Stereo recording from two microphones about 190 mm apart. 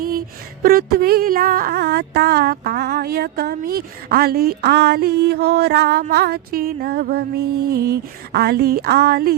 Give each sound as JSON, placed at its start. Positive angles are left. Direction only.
{"t": 0.6, "sound": "music", "side_deg": -50}